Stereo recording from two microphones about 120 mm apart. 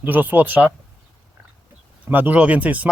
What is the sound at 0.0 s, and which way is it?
Speech, 15° right (ahead or behind).